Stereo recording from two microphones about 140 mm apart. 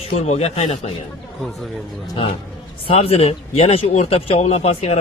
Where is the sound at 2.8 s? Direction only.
45° left (ahead or behind).